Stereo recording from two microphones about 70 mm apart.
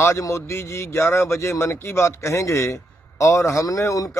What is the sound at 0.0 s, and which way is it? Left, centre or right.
A man's voice, left.